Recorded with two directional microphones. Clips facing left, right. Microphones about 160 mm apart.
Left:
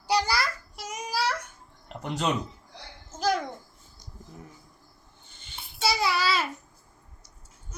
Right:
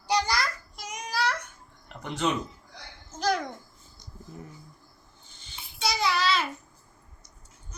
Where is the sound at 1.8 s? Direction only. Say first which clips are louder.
Even; 40° left (ahead or behind).